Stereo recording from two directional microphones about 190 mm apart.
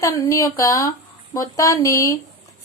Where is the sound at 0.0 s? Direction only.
15° left (ahead or behind).